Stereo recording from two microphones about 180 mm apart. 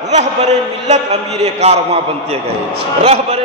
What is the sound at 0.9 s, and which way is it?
A man's voice, 35° right (ahead or behind).